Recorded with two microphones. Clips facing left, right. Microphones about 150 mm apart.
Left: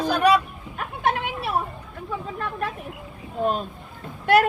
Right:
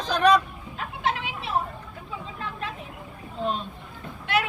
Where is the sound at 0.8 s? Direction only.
55° left (ahead or behind).